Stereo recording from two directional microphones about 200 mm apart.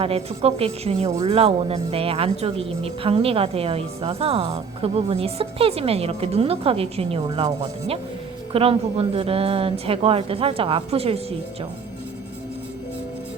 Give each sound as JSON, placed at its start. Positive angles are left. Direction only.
{"t": 0.0, "sound": "speech", "side_deg": -30}